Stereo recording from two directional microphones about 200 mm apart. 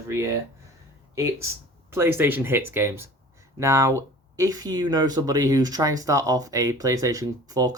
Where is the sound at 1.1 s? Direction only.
15° right (ahead or behind).